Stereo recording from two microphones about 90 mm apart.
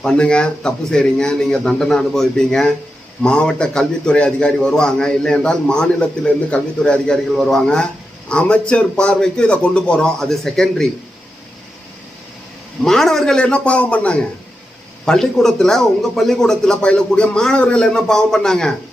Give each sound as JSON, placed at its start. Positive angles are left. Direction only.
{"t": 0.0, "sound": "a man's voice", "side_deg": 10}
{"t": 12.8, "sound": "a man's voice", "side_deg": 5}